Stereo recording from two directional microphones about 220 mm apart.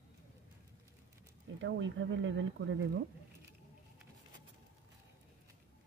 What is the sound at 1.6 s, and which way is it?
Speech, 55° right (ahead or behind).